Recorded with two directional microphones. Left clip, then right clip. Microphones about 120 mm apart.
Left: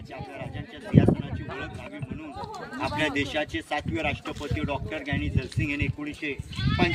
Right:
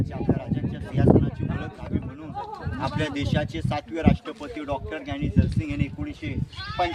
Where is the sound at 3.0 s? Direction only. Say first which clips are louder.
Left 3 dB; 25° right (ahead or behind).